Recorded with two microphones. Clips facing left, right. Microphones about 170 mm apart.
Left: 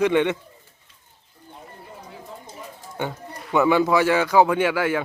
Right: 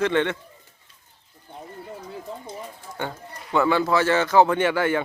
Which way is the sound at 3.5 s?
15° left (ahead or behind).